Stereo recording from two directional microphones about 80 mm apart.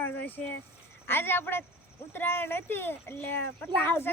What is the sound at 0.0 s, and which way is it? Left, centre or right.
Speech, left.